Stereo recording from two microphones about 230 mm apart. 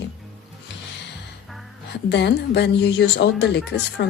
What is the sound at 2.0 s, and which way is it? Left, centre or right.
A woman's voice, left.